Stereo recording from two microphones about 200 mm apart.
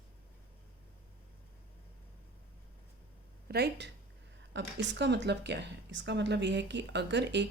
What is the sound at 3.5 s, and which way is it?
A woman's voice, 55° right (ahead or behind).